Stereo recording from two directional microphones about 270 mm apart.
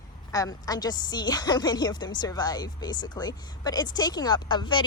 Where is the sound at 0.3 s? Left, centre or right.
Centre.